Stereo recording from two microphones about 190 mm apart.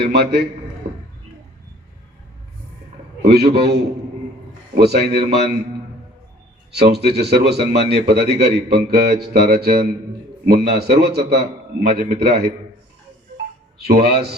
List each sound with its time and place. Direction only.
0.0 s a man's voice: 60° right (ahead or behind)
3.2 s a man's voice: 60° right (ahead or behind)
6.7 s a man's voice: 60° right (ahead or behind)
13.8 s a man's voice: 60° right (ahead or behind)